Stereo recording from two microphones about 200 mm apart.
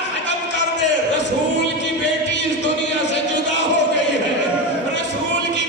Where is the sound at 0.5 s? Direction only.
60° left (ahead or behind).